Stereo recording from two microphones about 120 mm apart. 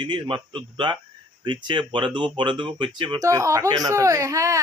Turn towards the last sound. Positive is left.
turn(degrees=-25)  # may be behind; listen again after turning